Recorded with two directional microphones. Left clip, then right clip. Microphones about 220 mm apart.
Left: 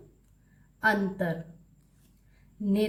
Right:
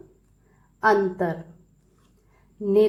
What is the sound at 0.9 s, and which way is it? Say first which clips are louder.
Speech: right 7 dB; 15° right (ahead or behind).